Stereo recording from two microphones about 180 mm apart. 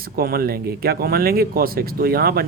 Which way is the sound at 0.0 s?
55° right (ahead or behind).